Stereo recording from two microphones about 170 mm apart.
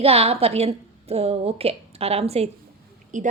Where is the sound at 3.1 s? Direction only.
50° right (ahead or behind).